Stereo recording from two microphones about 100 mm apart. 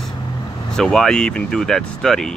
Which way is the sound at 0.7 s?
5° left (ahead or behind).